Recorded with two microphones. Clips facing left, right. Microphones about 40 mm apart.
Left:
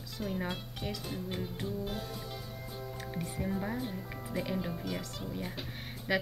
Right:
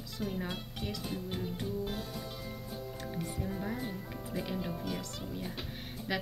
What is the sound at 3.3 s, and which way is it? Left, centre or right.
Speech, left.